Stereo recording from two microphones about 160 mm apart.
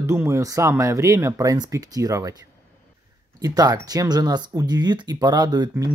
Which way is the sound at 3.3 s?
25° right (ahead or behind).